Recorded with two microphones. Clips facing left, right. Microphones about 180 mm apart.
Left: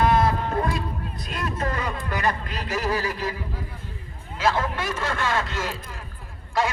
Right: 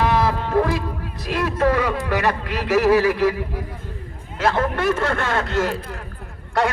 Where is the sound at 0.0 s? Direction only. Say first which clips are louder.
Right 1 dB; 65° right (ahead or behind).